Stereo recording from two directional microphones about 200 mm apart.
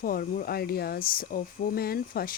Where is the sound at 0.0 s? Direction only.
45° left (ahead or behind).